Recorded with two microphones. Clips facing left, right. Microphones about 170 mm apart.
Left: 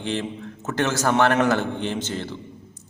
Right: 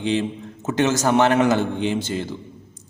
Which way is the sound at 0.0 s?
15° right (ahead or behind).